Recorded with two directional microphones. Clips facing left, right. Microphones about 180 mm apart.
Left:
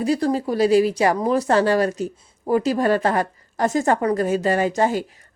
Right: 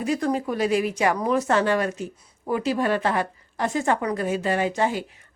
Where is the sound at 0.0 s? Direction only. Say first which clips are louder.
Left 4 dB; 35° left (ahead or behind).